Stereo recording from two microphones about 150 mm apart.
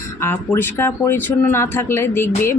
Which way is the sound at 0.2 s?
15° left (ahead or behind).